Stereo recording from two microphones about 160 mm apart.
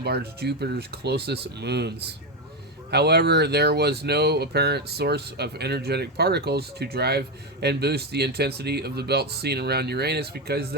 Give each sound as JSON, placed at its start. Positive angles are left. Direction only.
{"t": 0.0, "sound": "speech", "side_deg": -90}